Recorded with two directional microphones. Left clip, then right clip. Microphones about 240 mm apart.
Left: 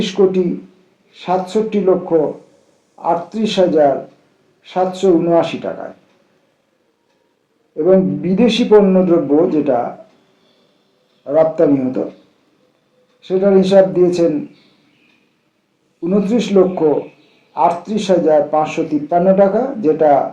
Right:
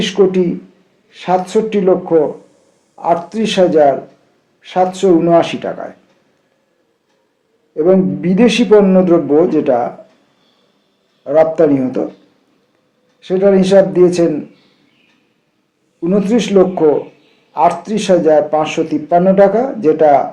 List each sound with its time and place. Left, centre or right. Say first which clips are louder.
0.0 s speech: right 2 dB; right
7.8 s speech: right 1 dB; right
11.2 s speech: right 2 dB; right
13.2 s speech: right 2 dB; right
16.0 s speech: right 2 dB; right